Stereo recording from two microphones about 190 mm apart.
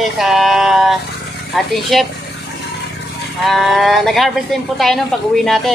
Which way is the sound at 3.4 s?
Centre (ahead or behind).